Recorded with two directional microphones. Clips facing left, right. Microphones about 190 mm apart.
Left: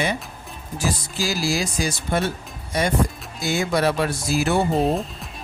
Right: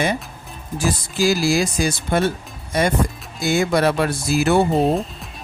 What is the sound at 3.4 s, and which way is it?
Speech, 55° right (ahead or behind).